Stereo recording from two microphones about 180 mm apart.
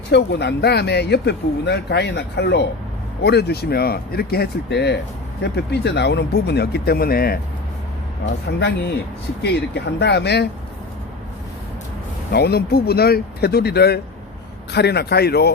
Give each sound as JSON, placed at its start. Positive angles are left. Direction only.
{"t": 0.1, "sound": "speech", "side_deg": 70}
{"t": 8.4, "sound": "speech", "side_deg": 70}
{"t": 12.3, "sound": "speech", "side_deg": 60}